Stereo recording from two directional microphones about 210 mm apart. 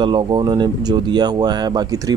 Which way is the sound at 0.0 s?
20° right (ahead or behind).